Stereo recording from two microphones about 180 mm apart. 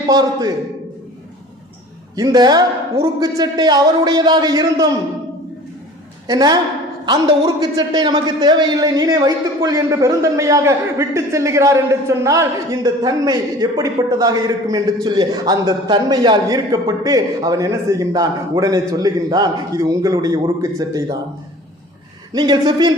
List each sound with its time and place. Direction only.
0.1 s a man's voice: 20° right (ahead or behind)
2.1 s a man's voice: 20° right (ahead or behind)
6.2 s a man's voice: 20° right (ahead or behind)
22.3 s a man's voice: 25° right (ahead or behind)